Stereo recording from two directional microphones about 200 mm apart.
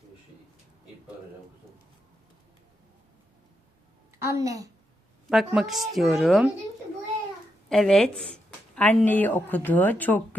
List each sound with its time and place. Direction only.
4.3 s a woman's voice: 15° right (ahead or behind)
5.3 s a woman's voice: centre (ahead or behind)
7.7 s a woman's voice: centre (ahead or behind)